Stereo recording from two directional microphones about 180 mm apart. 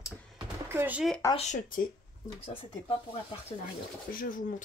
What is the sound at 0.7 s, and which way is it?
Speech, 10° right (ahead or behind).